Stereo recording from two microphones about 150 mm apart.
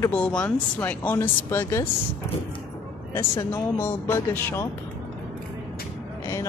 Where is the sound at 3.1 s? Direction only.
15° left (ahead or behind).